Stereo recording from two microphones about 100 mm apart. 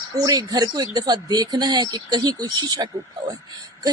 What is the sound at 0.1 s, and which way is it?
Speech, 40° right (ahead or behind).